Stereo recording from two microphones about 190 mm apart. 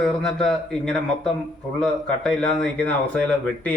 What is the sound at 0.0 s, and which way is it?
A man's voice, 5° left (ahead or behind).